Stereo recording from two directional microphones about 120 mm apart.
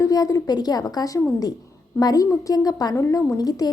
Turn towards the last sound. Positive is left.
turn(degrees=30)  # may be behind; listen again after turning